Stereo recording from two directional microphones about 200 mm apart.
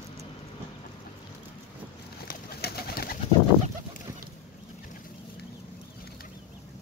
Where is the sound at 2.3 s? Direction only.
50° left (ahead or behind).